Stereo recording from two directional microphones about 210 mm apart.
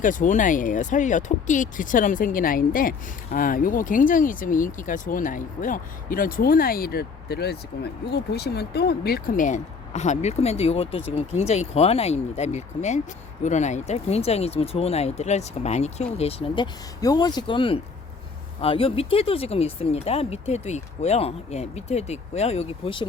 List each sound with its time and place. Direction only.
0.0 s speech: 40° left (ahead or behind)